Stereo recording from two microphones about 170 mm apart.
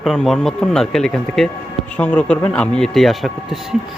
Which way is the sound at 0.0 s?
5° left (ahead or behind).